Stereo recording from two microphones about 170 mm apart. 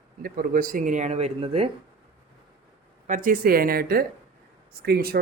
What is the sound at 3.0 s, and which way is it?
Speech, 50° right (ahead or behind).